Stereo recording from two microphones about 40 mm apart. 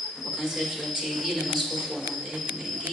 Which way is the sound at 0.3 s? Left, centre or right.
Centre.